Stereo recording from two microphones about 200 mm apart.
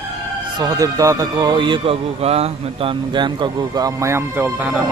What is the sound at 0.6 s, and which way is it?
Speech, 20° right (ahead or behind).